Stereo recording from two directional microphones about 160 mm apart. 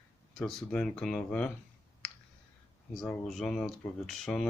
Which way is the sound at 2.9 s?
Centre (ahead or behind).